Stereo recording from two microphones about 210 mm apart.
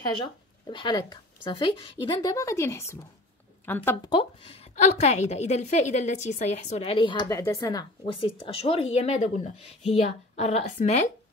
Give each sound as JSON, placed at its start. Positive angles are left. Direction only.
{"t": 0.2, "sound": "a woman's voice", "side_deg": 20}
{"t": 4.1, "sound": "a woman's voice", "side_deg": 25}